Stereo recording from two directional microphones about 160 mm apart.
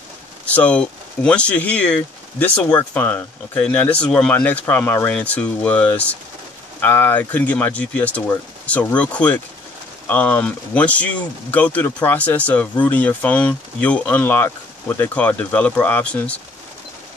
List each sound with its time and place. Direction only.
0.6 s speech: 5° left (ahead or behind)